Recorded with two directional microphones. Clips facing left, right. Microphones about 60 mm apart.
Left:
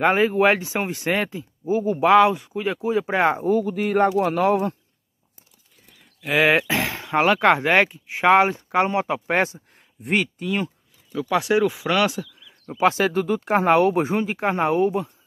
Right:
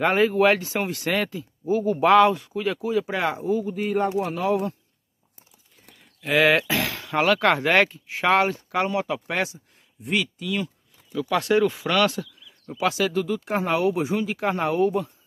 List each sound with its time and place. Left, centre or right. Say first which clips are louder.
0.0 s speech: left 1 dB; centre; by 3.4 s left
3.4 s speech: left 4 dB; left
6.2 s speech: left 1 dB; centre; by 10.7 s left
11.1 s speech: left 1 dB; centre
12.6 s speech: left 4 dB; left